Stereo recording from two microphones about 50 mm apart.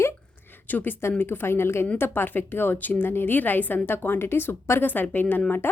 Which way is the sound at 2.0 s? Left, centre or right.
Left.